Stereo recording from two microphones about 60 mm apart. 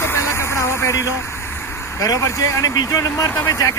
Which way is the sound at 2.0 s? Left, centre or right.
Left.